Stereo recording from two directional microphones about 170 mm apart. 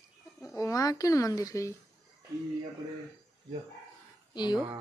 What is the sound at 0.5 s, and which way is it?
Speech, 20° left (ahead or behind).